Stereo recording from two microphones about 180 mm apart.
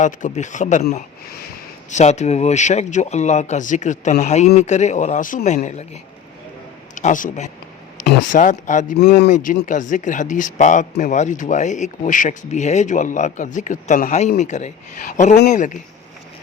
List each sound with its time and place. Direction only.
0.0 s speech: 45° left (ahead or behind)
9.0 s speech: 70° left (ahead or behind)
9.3 s speech: 45° left (ahead or behind)